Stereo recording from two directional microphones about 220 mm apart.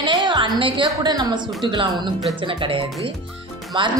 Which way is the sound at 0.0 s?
20° right (ahead or behind).